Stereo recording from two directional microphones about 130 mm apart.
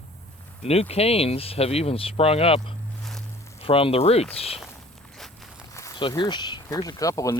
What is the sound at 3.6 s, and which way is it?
Speech, 45° left (ahead or behind).